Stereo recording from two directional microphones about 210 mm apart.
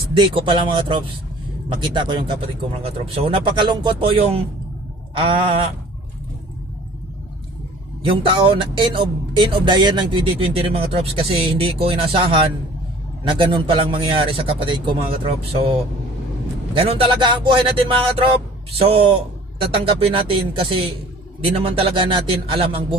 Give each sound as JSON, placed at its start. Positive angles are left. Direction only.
{"t": 0.1, "sound": "speech", "side_deg": -25}
{"t": 8.0, "sound": "speech", "side_deg": -25}
{"t": 16.7, "sound": "speech", "side_deg": -25}